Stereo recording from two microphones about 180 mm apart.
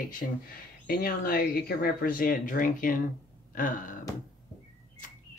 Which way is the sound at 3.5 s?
45° left (ahead or behind).